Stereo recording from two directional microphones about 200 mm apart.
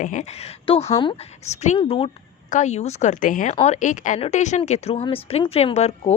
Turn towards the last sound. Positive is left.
turn(degrees=35)  # may be behind; listen again after turning